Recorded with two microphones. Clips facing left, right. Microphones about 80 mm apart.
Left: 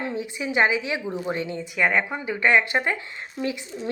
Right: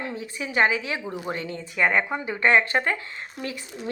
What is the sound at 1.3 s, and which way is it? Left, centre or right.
Speech, left.